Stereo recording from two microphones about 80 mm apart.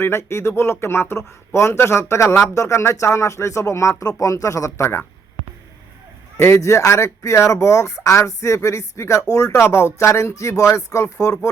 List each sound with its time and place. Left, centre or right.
0.0 s speech: left
6.4 s speech: left